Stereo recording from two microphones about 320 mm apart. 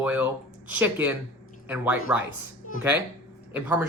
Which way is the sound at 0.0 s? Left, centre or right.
Centre.